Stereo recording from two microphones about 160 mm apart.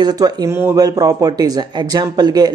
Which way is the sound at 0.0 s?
25° right (ahead or behind).